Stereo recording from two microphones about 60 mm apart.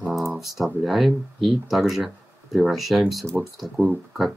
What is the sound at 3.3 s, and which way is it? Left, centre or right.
Speech, centre.